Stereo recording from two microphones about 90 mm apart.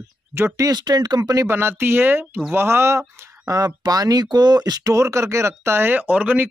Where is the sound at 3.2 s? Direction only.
40° right (ahead or behind).